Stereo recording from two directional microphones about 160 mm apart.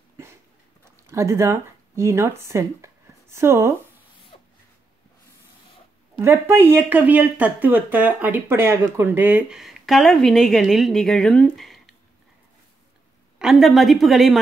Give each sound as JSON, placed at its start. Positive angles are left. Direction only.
{"t": 1.0, "sound": "speech", "side_deg": -20}
{"t": 6.1, "sound": "speech", "side_deg": -15}
{"t": 13.4, "sound": "a woman's voice", "side_deg": 0}